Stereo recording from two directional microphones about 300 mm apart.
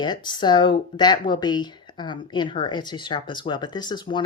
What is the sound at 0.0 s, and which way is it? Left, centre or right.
Speech, centre.